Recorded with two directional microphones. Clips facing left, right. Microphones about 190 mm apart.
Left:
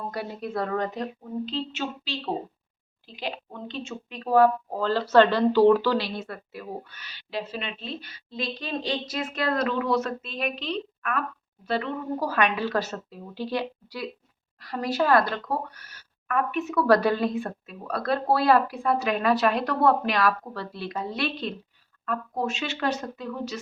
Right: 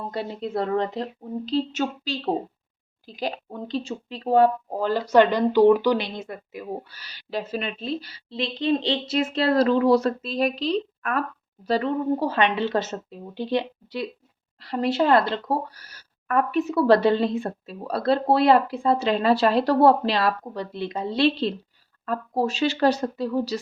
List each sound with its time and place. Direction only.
0.1 s speech: 25° right (ahead or behind)
6.9 s a woman's voice: 35° right (ahead or behind)
12.2 s a woman's voice: 25° right (ahead or behind)